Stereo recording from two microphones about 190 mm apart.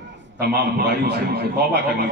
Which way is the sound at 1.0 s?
60° right (ahead or behind).